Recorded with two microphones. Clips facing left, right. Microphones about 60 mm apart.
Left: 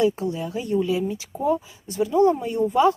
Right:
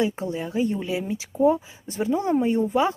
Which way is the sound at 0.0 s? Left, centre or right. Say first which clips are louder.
Left 3 dB; right.